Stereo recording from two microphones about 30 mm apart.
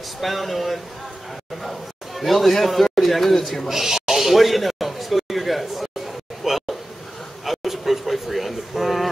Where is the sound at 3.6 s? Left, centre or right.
Centre.